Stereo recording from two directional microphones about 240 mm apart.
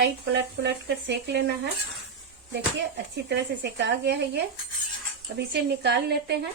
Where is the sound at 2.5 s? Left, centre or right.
Right.